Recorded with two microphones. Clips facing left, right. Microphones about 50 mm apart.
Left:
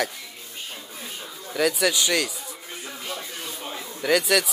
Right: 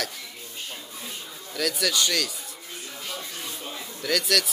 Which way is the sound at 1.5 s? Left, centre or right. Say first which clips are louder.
Left 5 dB; centre.